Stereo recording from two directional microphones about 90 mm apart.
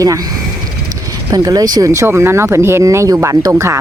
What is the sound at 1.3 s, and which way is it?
Speech, 45° right (ahead or behind).